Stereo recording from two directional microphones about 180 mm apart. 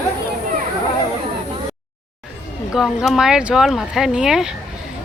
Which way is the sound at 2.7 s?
Centre (ahead or behind).